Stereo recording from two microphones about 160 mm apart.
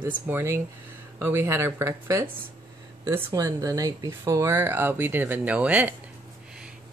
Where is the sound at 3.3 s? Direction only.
20° right (ahead or behind).